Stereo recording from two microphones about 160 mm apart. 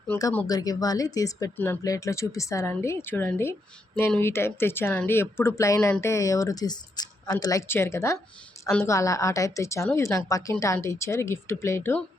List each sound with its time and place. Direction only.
0.4 s a woman's voice: 25° left (ahead or behind)